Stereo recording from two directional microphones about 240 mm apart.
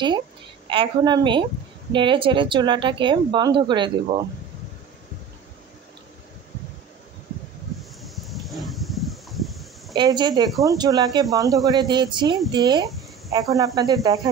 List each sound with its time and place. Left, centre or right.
0.7 s speech: centre
8.0 s a sound: centre
9.9 s speech: centre